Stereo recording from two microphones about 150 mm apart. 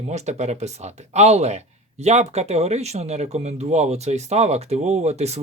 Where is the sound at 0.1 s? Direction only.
50° right (ahead or behind).